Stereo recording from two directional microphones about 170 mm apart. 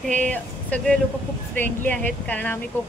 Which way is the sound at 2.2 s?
10° left (ahead or behind).